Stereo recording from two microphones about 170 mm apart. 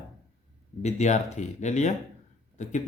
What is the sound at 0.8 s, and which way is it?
Speech, 45° left (ahead or behind).